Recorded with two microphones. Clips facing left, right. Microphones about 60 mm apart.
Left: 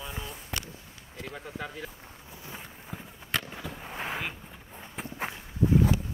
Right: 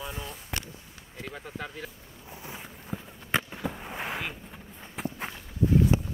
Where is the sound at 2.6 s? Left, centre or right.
Centre.